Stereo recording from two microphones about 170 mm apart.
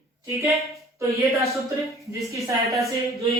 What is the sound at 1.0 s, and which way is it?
Speech, 20° right (ahead or behind).